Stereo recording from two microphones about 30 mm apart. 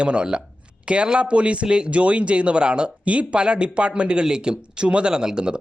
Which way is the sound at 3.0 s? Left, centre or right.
Right.